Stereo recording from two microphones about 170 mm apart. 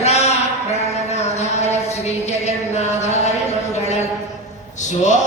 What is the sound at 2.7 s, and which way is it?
Music, 40° left (ahead or behind).